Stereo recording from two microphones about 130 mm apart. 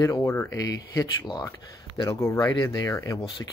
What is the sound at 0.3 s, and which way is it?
Speech, 15° left (ahead or behind).